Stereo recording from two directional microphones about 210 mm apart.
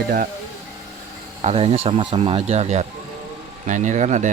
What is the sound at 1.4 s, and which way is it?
Speech, 30° right (ahead or behind).